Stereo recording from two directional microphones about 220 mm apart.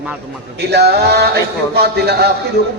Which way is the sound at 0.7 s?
45° right (ahead or behind).